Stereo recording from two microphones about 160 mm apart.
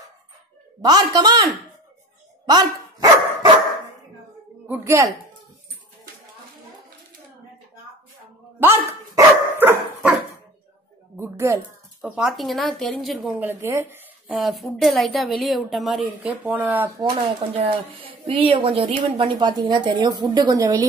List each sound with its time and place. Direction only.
0.8 s a woman's voice: 25° right (ahead or behind)
2.4 s dog: 25° right (ahead or behind)
4.6 s a woman's voice: 15° right (ahead or behind)
8.5 s dog: 15° right (ahead or behind)
11.1 s a sound: 15° right (ahead or behind)
12.2 s a woman's voice: centre (ahead or behind)
13.3 s a woman's voice: 15° right (ahead or behind)
14.2 s a woman's voice: centre (ahead or behind)
18.2 s a woman's voice: 35° right (ahead or behind)